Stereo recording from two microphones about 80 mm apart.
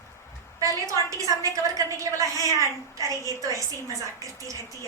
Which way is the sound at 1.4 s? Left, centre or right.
Right.